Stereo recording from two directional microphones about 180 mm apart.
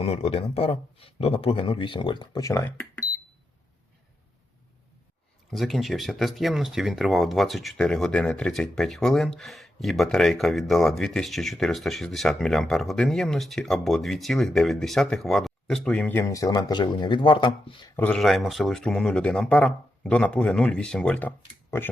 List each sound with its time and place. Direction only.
0.0 s speech: 35° left (ahead or behind); by 2.8 s 15° left (ahead or behind)
5.5 s speech: centre (ahead or behind); by 17.9 s 25° left (ahead or behind)
17.9 s speech: 5° left (ahead or behind)